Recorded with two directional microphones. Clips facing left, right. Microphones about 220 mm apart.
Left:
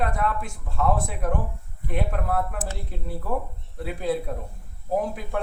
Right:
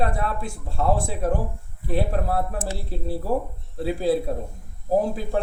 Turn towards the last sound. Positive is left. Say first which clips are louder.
# right 4 dB
turn(degrees=-30)  # may be behind; listen again after turning